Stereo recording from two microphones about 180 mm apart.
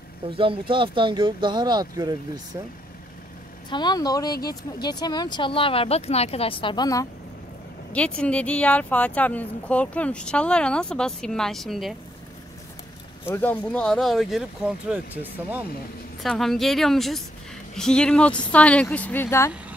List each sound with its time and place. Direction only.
0.4 s speech: 30° right (ahead or behind)
3.7 s speech: 20° left (ahead or behind)
7.9 s speech: 5° left (ahead or behind)
13.2 s speech: 10° left (ahead or behind)
16.2 s speech: centre (ahead or behind)